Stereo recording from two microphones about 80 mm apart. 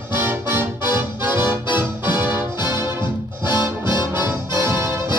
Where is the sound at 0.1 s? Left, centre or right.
Right.